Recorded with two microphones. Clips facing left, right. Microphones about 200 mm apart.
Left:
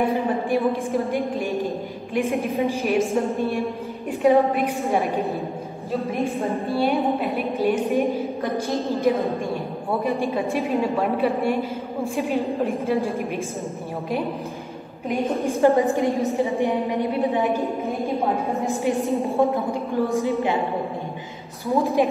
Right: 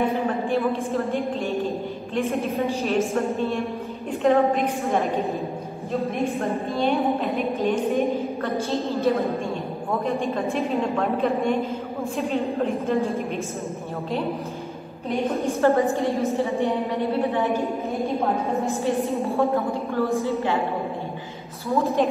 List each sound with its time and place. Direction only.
0.1 s a woman's voice: 15° left (ahead or behind)
6.8 s a woman's voice: 10° left (ahead or behind)
10.5 s a woman's voice: 5° left (ahead or behind)
15.4 s a woman's voice: 15° left (ahead or behind)
18.7 s a woman's voice: 15° left (ahead or behind)
21.6 s a woman's voice: 15° left (ahead or behind)